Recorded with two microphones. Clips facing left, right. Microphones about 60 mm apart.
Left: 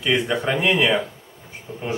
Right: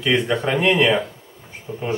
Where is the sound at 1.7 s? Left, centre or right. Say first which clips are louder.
Right 5 dB; centre.